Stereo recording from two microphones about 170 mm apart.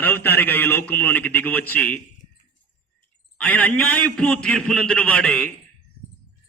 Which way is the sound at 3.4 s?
10° left (ahead or behind).